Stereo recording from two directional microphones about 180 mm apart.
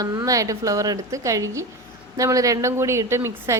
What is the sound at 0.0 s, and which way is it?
A woman's voice, 20° right (ahead or behind).